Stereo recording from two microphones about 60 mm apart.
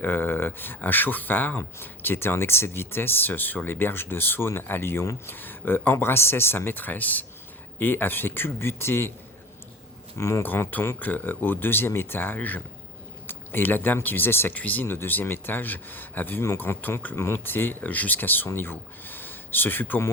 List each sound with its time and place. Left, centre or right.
0.0 s speech: left
10.2 s speech: left
10.4 s speech: left
14.5 s speech: left
14.8 s speech: left
16.7 s speech: left
17.2 s speech: left